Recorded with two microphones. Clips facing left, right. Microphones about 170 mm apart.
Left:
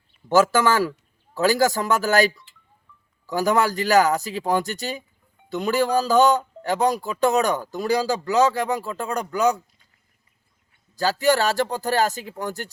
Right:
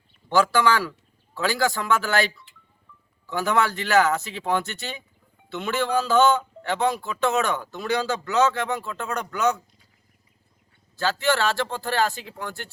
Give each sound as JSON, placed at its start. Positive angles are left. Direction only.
{"t": 0.3, "sound": "a man's voice", "side_deg": 45}
{"t": 10.9, "sound": "a man's voice", "side_deg": 40}